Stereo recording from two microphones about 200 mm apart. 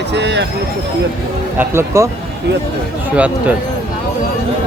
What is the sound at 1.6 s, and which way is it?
Speech, 10° right (ahead or behind).